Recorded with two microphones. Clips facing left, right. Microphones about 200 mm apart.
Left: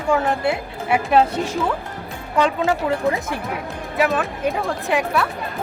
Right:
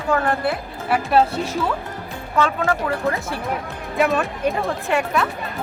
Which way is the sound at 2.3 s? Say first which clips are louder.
Left 1 dB; 20° left (ahead or behind).